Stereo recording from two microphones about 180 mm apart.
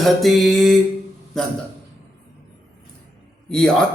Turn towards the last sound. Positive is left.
turn(degrees=5)  # may be behind; listen again after turning